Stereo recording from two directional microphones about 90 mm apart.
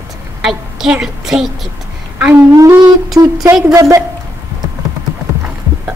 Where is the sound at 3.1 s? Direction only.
40° right (ahead or behind).